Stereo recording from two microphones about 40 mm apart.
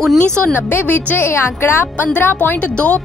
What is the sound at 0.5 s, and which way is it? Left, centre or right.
Speech, left.